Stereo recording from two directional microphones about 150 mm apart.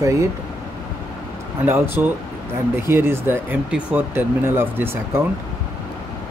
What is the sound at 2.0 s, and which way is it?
Speech, 15° right (ahead or behind).